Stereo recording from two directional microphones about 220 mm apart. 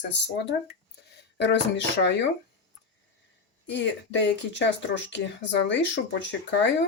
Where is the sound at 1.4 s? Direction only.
50° left (ahead or behind).